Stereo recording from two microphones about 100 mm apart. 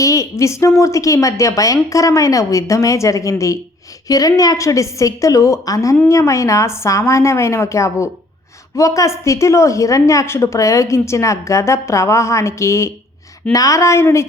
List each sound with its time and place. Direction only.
0.0 s a woman's voice: 30° left (ahead or behind)